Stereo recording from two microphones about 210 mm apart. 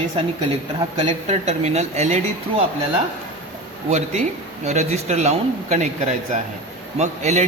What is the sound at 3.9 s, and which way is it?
A man's voice, 35° right (ahead or behind).